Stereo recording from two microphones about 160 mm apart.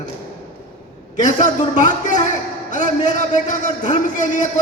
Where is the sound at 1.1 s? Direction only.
50° left (ahead or behind).